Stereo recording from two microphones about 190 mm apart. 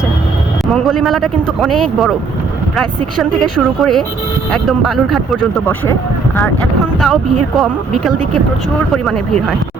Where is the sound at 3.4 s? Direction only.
Centre (ahead or behind).